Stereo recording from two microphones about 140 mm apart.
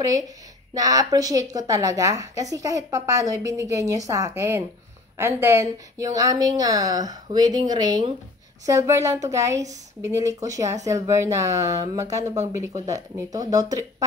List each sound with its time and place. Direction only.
0.7 s a woman's voice: 25° right (ahead or behind)